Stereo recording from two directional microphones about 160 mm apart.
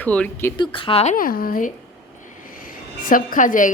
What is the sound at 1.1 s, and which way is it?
A woman's voice, 65° left (ahead or behind).